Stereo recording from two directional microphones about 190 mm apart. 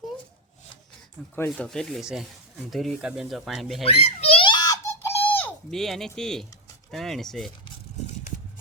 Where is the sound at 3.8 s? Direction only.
30° left (ahead or behind); by 6.4 s 5° left (ahead or behind).